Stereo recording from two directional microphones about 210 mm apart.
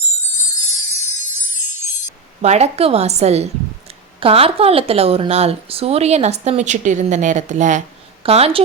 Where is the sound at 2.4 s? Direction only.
30° right (ahead or behind).